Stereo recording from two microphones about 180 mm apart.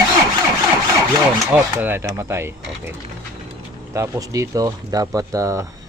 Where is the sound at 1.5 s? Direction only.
10° right (ahead or behind).